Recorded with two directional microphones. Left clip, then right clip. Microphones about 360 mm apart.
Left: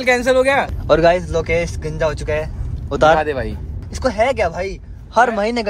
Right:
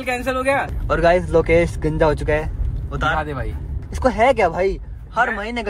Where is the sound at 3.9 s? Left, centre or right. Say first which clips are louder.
Right 1 dB; centre.